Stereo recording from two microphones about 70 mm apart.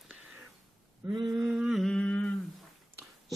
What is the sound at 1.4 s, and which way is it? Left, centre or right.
Humming, centre.